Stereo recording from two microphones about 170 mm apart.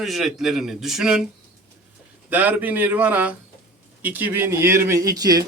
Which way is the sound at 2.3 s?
10° right (ahead or behind).